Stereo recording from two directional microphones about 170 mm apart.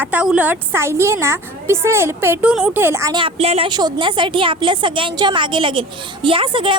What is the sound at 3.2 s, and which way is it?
A woman's voice, 35° right (ahead or behind).